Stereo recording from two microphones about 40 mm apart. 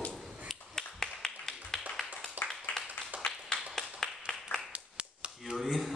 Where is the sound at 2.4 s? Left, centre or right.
Right.